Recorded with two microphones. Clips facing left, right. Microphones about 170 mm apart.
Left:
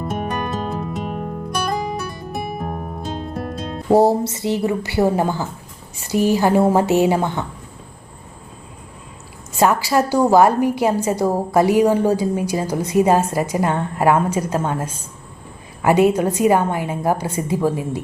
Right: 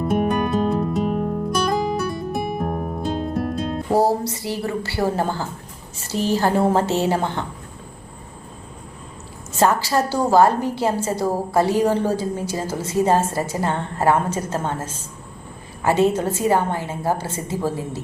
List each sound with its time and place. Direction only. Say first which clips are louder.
0.0 s music: right 4 dB; centre (ahead or behind)
3.9 s a woman's voice: left 5 dB; 25° left (ahead or behind)
9.6 s a woman's voice: left 2 dB; 15° left (ahead or behind)